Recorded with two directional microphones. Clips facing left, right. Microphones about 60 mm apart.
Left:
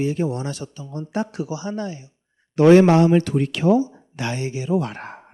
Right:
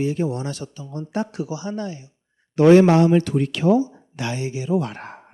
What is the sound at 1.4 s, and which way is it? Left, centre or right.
Speech, left.